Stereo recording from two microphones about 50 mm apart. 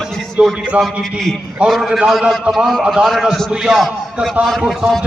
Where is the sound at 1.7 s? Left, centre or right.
Centre.